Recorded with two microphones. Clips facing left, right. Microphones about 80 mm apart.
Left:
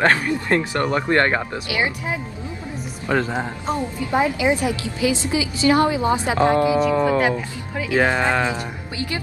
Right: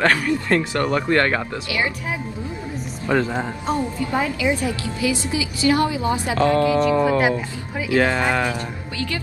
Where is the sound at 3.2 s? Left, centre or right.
Centre.